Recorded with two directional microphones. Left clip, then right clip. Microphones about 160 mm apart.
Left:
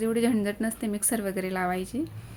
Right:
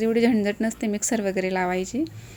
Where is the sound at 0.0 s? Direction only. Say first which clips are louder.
Right 5 dB; 25° right (ahead or behind).